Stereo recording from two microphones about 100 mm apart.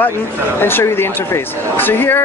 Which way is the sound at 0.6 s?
20° left (ahead or behind).